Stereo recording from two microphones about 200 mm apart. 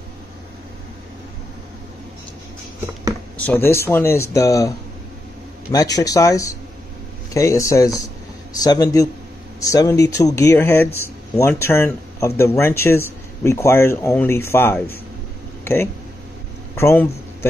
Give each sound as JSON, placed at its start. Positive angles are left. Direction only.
{"t": 3.4, "sound": "speech", "side_deg": 10}
{"t": 5.9, "sound": "speech", "side_deg": 15}